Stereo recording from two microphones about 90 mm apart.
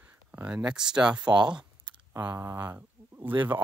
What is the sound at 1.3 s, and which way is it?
Speech, 55° right (ahead or behind).